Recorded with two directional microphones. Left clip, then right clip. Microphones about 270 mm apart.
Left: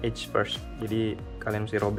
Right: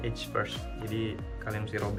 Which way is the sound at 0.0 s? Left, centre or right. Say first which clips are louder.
Left 5 dB; left.